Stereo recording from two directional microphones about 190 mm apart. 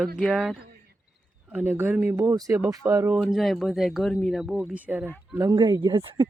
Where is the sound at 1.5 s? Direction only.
10° right (ahead or behind).